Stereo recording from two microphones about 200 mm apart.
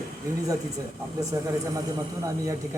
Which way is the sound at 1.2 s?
15° right (ahead or behind).